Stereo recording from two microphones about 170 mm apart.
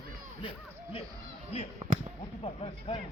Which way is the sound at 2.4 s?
35° left (ahead or behind).